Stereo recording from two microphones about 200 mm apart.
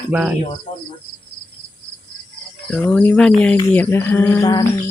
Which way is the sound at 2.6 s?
5° left (ahead or behind).